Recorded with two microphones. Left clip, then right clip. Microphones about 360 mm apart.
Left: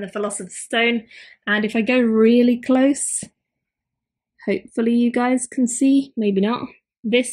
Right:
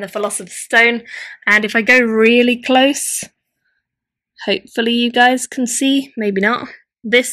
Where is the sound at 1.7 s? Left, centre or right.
Right.